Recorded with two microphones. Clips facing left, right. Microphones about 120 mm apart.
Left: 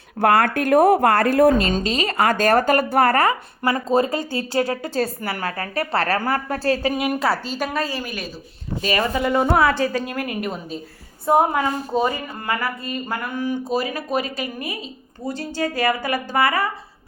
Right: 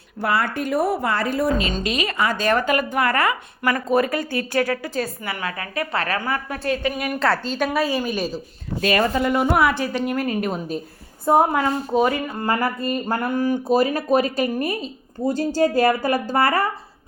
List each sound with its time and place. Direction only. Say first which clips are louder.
0.2 s speech: left 5 dB; 50° left (ahead or behind)
1.8 s a woman's voice: left 2 dB; 35° left (ahead or behind)
3.8 s a woman's voice: even; 25° left (ahead or behind)
7.2 s a woman's voice: right 1 dB; 5° left (ahead or behind)
7.7 s a woman's voice: right 4 dB; 10° right (ahead or behind)
8.8 s speech: right 3 dB; 50° right (ahead or behind)
9.1 s a woman's voice: even; 20° left (ahead or behind)
9.5 s a woman's voice: left 1 dB; 15° right (ahead or behind)
11.3 s a woman's voice: even; 10° left (ahead or behind)
12.8 s speech: right 4 dB; 45° right (ahead or behind)